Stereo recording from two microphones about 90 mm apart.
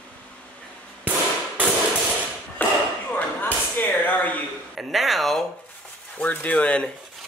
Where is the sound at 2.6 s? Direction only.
20° left (ahead or behind).